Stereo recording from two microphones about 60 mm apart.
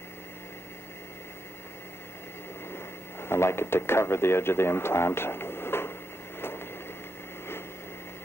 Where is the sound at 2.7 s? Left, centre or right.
Left.